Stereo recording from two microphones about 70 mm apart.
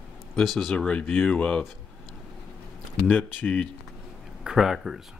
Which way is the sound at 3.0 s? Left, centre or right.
Left.